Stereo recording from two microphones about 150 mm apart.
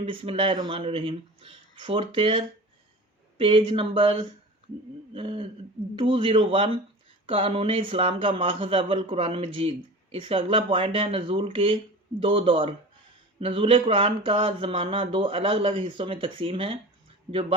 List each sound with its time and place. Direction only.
0.0 s speech: 40° right (ahead or behind)